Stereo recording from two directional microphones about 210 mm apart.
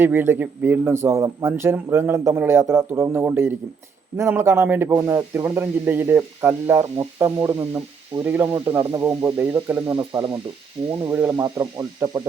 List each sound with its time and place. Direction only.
0.0 s speech: 10° right (ahead or behind)
10.0 s speech: 20° right (ahead or behind)
11.0 s speech: 10° right (ahead or behind)